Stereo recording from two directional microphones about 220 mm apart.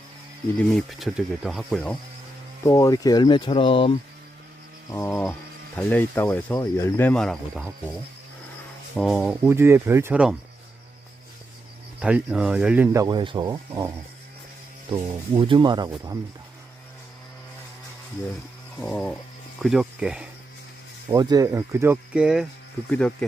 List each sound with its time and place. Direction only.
0.7 s speech: centre (ahead or behind)
2.6 s speech: 15° left (ahead or behind)
4.9 s speech: 10° left (ahead or behind)
9.0 s speech: centre (ahead or behind)
11.9 s speech: 5° right (ahead or behind)
18.8 s speech: 5° left (ahead or behind)
21.1 s speech: 15° right (ahead or behind); by 23.1 s 5° left (ahead or behind)